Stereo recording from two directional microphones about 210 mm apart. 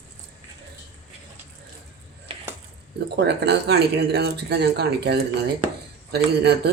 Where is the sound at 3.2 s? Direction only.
55° right (ahead or behind).